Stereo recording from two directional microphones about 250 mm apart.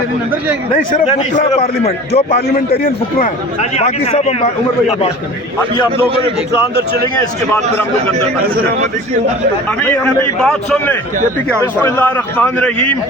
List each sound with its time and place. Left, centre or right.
1.0 s a man's voice: left
3.8 s a man's voice: left
7.2 s a man's voice: centre
10.4 s a man's voice: centre